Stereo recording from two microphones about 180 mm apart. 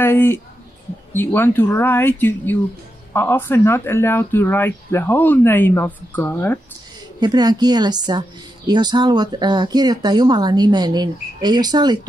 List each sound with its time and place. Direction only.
0.0 s speech: 10° left (ahead or behind)
7.2 s speech: 25° right (ahead or behind)